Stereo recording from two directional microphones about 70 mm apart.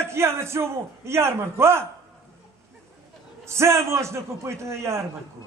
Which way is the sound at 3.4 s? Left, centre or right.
Right.